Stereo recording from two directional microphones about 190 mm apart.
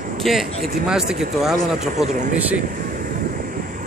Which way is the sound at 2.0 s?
35° right (ahead or behind).